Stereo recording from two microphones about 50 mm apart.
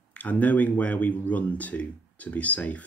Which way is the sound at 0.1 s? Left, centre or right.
Left.